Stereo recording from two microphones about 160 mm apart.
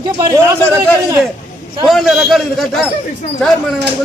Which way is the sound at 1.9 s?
Centre (ahead or behind).